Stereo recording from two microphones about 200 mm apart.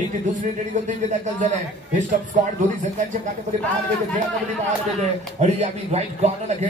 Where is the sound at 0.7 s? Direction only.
35° right (ahead or behind).